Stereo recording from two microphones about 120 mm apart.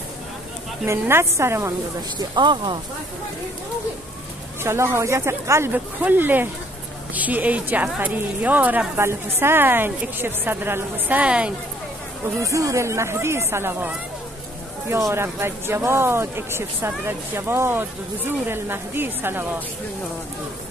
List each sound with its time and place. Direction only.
0.8 s speech: 20° right (ahead or behind)
2.1 s speech: 40° right (ahead or behind)
4.6 s a woman's voice: 20° right (ahead or behind)
12.4 s speech: 25° right (ahead or behind)